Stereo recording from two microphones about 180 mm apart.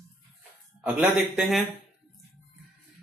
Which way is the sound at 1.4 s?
Centre (ahead or behind).